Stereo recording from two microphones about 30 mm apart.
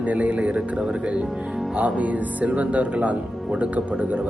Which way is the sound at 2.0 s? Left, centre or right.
Right.